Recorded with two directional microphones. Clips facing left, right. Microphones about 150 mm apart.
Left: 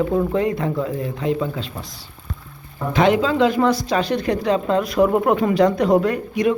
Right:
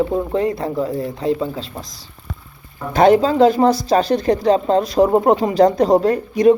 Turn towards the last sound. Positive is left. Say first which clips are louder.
# right 5 dB
turn(degrees=-35)  # may be behind; listen again after turning